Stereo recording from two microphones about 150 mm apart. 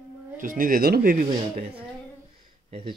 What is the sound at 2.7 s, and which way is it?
Speech, 40° right (ahead or behind).